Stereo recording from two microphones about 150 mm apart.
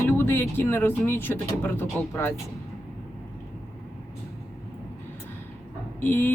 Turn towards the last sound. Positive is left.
turn(degrees=10)  # may be behind; listen again after turning